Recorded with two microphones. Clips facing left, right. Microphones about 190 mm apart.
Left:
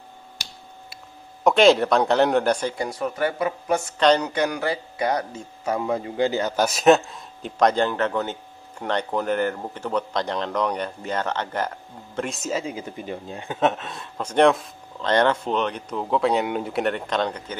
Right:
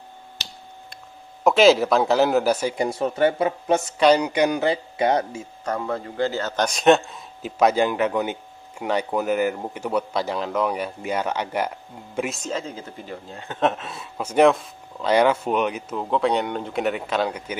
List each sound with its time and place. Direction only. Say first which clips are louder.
1.4 s speech: right 1 dB; centre (ahead or behind)
2.8 s a man's voice: right 4 dB; 25° right (ahead or behind)
4.0 s a man's voice: right 2 dB; 10° right (ahead or behind)
5.7 s a man's voice: left 2 dB; 15° left (ahead or behind); by 12.3 s 10° right (ahead or behind)
12.3 s speech: left 1 dB; 5° left (ahead or behind)
13.6 s speech: even; centre (ahead or behind)